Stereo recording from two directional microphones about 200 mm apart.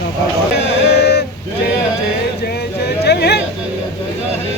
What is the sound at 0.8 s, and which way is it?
Male singing, 55° left (ahead or behind).